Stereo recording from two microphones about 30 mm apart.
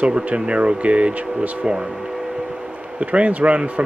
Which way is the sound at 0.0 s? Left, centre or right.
Right.